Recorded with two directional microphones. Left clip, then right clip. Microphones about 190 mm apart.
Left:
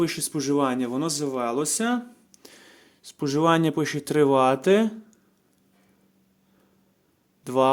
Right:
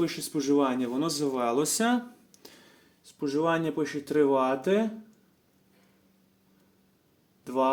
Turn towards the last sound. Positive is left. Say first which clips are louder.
# left 5 dB
turn(degrees=45)  # may be behind; listen again after turning